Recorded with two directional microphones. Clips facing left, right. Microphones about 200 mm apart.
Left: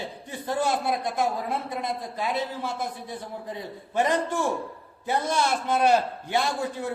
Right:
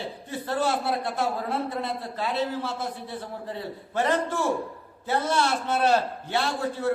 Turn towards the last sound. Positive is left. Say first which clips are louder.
# even
turn(degrees=15)  # may be behind; listen again after turning